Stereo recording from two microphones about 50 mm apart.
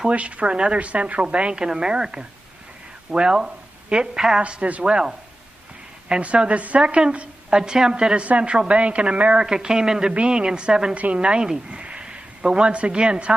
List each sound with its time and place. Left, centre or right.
0.0 s a woman's voice: right
6.2 s a woman's voice: right